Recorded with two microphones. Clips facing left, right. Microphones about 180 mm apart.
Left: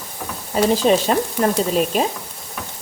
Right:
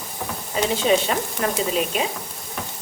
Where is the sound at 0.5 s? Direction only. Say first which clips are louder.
Left 4 dB; 40° left (ahead or behind).